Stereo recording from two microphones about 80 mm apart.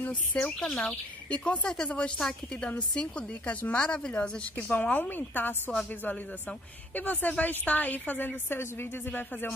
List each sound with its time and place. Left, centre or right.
0.0 s speech: left
0.6 s a woman's voice: centre
7.0 s a woman's voice: left